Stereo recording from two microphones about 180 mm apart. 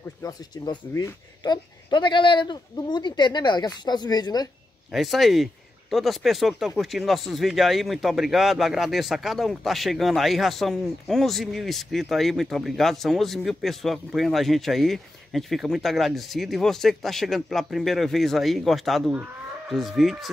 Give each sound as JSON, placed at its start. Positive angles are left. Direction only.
{"t": 0.2, "sound": "speech", "side_deg": 20}
{"t": 4.9, "sound": "speech", "side_deg": 0}